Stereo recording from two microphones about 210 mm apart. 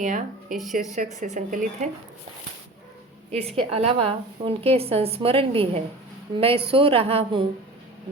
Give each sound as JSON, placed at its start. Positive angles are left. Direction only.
{"t": 0.0, "sound": "speech", "side_deg": -35}
{"t": 3.3, "sound": "a woman's voice", "side_deg": -30}